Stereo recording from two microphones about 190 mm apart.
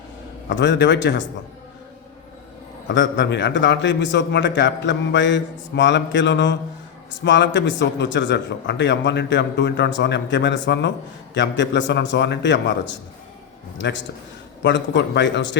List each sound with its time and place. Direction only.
0.4 s a man's voice: 70° left (ahead or behind)
2.8 s a man's voice: 70° left (ahead or behind)